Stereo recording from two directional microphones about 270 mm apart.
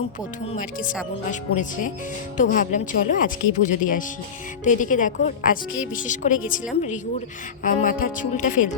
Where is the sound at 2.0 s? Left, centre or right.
Left.